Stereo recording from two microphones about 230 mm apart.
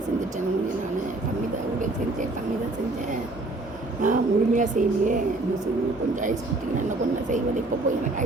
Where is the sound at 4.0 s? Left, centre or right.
Right.